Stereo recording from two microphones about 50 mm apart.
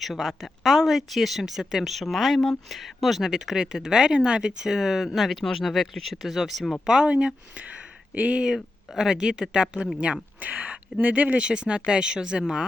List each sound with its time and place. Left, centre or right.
0.0 s speech: centre
3.3 s speech: centre
6.8 s speech: centre
9.0 s speech: centre
10.4 s speech: right
11.4 s speech: centre